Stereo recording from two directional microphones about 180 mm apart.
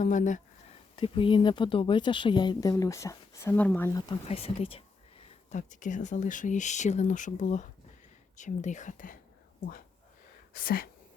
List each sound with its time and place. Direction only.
0.0 s a sound: 45° left (ahead or behind)
0.9 s speech: 30° left (ahead or behind); by 4.0 s 10° left (ahead or behind)
4.3 s speech: 30° left (ahead or behind)
10.5 s speech: 55° left (ahead or behind)